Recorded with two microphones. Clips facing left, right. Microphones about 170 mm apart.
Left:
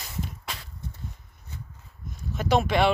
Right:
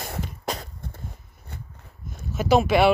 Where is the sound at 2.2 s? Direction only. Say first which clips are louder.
Right 4 dB; 5° right (ahead or behind).